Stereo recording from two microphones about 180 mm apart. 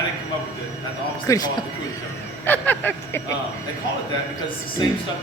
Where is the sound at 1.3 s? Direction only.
20° left (ahead or behind).